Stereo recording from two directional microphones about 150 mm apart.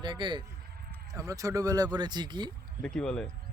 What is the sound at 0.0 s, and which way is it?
Speech, 30° right (ahead or behind).